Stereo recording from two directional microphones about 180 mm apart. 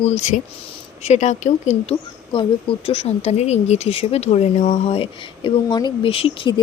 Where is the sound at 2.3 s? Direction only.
30° left (ahead or behind).